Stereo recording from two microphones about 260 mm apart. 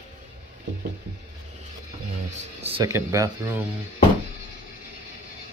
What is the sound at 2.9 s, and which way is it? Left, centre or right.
Speech, centre.